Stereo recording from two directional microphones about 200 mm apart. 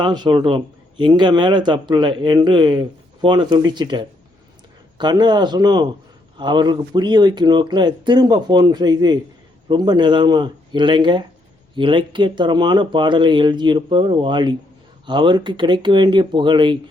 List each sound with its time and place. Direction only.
0.0 s speech: 20° right (ahead or behind)